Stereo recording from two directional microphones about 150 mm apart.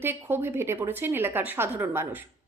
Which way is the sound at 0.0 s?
15° right (ahead or behind).